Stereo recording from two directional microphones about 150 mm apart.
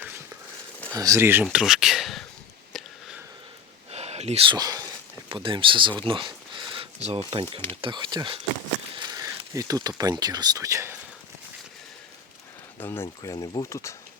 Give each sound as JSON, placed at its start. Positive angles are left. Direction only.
{"t": 0.9, "sound": "speech", "side_deg": -20}
{"t": 1.5, "sound": "speech", "side_deg": -5}
{"t": 2.7, "sound": "a sound", "side_deg": 0}
{"t": 3.9, "sound": "a sound", "side_deg": -45}
{"t": 4.5, "sound": "speech", "side_deg": -25}
{"t": 12.8, "sound": "speech", "side_deg": 15}